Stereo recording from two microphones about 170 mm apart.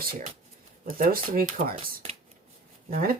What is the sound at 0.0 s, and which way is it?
Speech, 55° right (ahead or behind).